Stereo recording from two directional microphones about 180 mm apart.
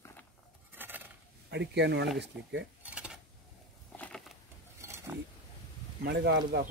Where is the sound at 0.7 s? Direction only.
10° right (ahead or behind).